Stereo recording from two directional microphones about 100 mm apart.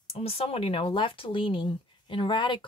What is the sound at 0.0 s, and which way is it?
Speech, 75° left (ahead or behind).